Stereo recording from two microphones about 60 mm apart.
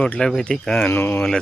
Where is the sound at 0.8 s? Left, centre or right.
Left.